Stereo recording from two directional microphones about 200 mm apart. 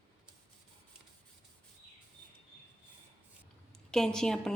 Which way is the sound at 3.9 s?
5° left (ahead or behind).